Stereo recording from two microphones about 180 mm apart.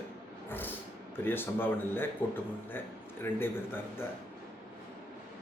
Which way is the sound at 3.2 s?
10° left (ahead or behind).